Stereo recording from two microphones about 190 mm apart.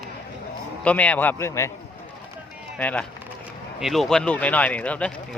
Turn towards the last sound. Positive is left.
turn(degrees=5)  # may be behind; listen again after turning